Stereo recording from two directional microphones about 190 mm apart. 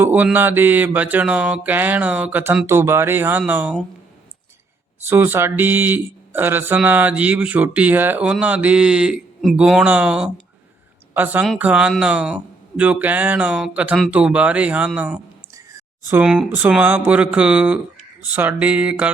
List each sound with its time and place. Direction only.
0.0 s speech: 10° right (ahead or behind)
5.0 s speech: 10° right (ahead or behind)